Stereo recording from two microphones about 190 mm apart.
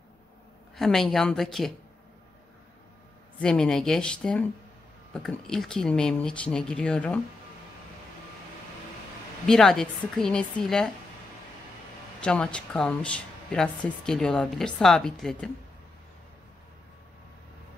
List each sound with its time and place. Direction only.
0.7 s speech: centre (ahead or behind)
3.3 s speech: 5° left (ahead or behind)
9.5 s speech: centre (ahead or behind)
12.2 s speech: 5° left (ahead or behind)